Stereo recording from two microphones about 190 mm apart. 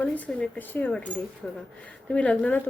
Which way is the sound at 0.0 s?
5° left (ahead or behind).